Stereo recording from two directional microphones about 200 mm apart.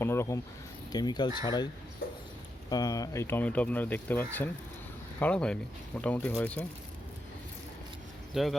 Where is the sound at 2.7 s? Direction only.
20° left (ahead or behind).